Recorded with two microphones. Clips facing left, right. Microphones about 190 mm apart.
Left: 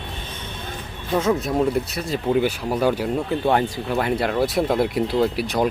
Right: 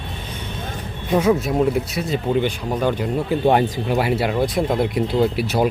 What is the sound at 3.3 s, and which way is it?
Speech, 15° right (ahead or behind).